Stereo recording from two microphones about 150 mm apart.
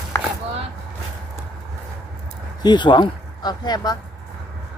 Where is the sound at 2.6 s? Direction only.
30° left (ahead or behind).